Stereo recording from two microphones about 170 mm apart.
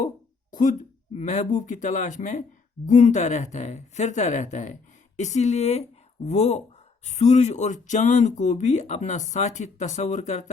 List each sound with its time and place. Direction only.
0.5 s speech: 50° left (ahead or behind)